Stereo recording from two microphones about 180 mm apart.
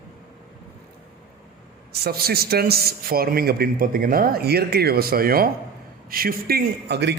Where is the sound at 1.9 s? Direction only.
60° right (ahead or behind).